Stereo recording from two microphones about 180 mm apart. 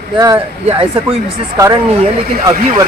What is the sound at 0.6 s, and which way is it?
Speech, 30° right (ahead or behind).